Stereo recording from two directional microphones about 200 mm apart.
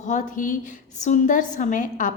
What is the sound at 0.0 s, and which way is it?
A woman's voice, 40° left (ahead or behind).